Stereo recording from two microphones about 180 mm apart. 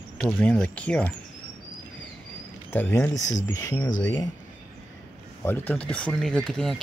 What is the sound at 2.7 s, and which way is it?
Speech, 10° left (ahead or behind).